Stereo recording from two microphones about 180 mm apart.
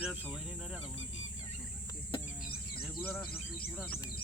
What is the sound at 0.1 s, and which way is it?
Speech, 5° right (ahead or behind).